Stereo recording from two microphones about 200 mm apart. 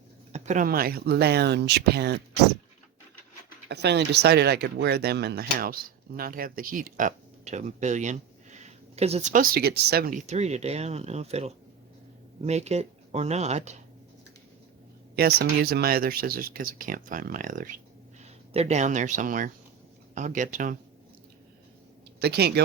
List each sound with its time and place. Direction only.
0.3 s speech: 35° right (ahead or behind); by 2.2 s 55° right (ahead or behind)
3.7 s speech: 55° right (ahead or behind); by 13.7 s 35° right (ahead or behind)
15.1 s speech: 50° right (ahead or behind)
22.2 s speech: 55° right (ahead or behind)